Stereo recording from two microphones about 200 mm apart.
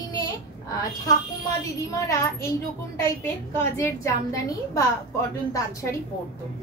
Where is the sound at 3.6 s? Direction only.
10° left (ahead or behind).